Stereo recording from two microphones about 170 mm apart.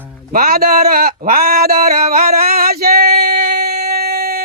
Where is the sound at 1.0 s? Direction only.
60° right (ahead or behind).